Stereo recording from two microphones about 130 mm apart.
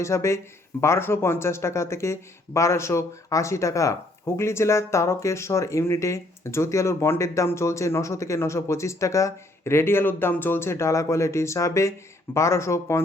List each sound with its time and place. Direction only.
0.0 s speech: 20° left (ahead or behind)